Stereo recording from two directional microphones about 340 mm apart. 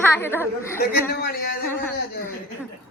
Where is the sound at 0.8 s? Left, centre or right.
Left.